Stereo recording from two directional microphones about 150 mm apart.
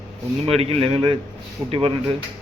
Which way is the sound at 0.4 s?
40° right (ahead or behind).